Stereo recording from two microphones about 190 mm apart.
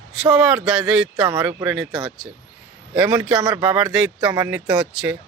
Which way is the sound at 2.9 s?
5° right (ahead or behind).